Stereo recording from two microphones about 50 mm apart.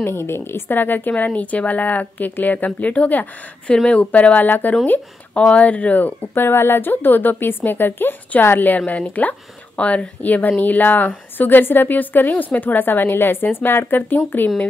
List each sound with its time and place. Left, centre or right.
0.0 s speech: left
3.6 s speech: centre
4.1 s speech: left
5.3 s speech: left
6.3 s a woman's voice: left